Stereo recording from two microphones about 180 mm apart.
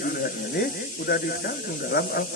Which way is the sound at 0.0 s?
60° left (ahead or behind).